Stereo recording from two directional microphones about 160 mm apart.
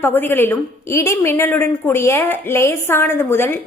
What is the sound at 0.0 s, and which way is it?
A woman's voice, 15° left (ahead or behind).